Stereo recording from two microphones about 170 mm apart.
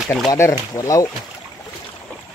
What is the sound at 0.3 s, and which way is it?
Speech, 20° left (ahead or behind).